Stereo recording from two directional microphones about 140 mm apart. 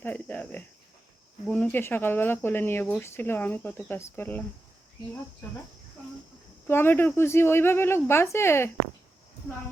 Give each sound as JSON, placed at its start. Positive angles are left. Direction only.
{"t": 0.0, "sound": "cricket", "side_deg": 10}
{"t": 1.5, "sound": "speech", "side_deg": 10}
{"t": 6.7, "sound": "speech", "side_deg": 15}